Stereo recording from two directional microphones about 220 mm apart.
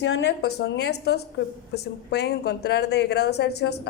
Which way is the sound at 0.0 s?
55° left (ahead or behind).